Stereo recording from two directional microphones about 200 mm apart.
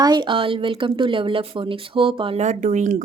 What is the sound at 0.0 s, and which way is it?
Speech, 20° right (ahead or behind).